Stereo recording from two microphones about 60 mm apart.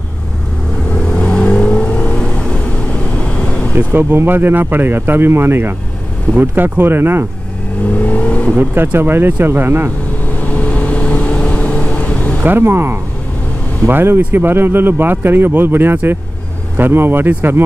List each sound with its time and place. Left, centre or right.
0.9 s vehicle: centre
3.7 s a man's voice: right
7.9 s vehicle: left
8.9 s a man's voice: right
10.2 s vehicle: left
12.4 s a man's voice: right